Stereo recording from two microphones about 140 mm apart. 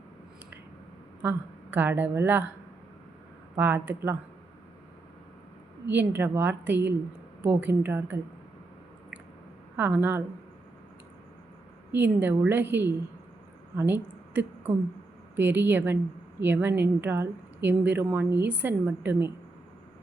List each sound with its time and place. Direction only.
1.2 s a woman's voice: 15° right (ahead or behind)
3.5 s speech: 15° right (ahead or behind)
5.9 s speech: 15° right (ahead or behind)
9.7 s speech: 15° right (ahead or behind)
11.9 s a woman's voice: 15° right (ahead or behind)